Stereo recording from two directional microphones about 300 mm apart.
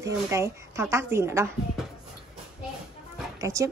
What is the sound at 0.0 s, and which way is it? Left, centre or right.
Speech, centre.